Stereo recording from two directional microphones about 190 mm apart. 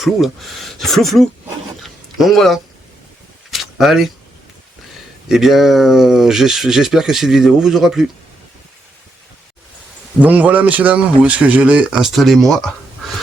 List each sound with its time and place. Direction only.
0.0 s speech: centre (ahead or behind)
1.8 s a sound: centre (ahead or behind)
5.3 s speech: centre (ahead or behind)
10.2 s speech: 10° right (ahead or behind)